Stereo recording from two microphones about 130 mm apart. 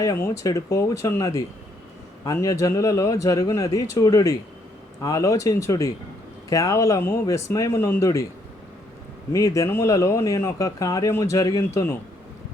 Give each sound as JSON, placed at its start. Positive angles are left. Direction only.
{"t": 0.0, "sound": "speech", "side_deg": 25}
{"t": 9.3, "sound": "speech", "side_deg": 25}